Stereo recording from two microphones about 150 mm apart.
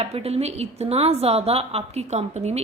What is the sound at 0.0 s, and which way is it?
A woman's voice, 45° right (ahead or behind).